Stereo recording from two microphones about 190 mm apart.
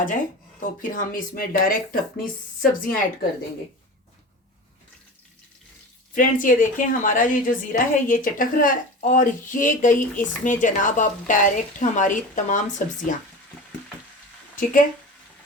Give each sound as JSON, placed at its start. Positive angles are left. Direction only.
{"t": 0.6, "sound": "a woman's voice", "side_deg": 45}
{"t": 6.1, "sound": "a woman's voice", "side_deg": 45}
{"t": 14.5, "sound": "speech", "side_deg": 45}